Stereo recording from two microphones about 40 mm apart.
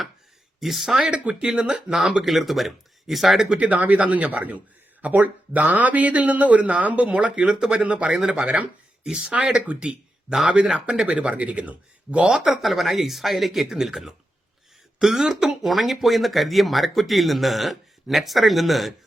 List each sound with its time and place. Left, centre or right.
0.6 s speech: centre
1.1 s speech: right
2.2 s speech: centre
3.5 s speech: right
7.2 s speech: right
9.0 s speech: centre
12.5 s speech: centre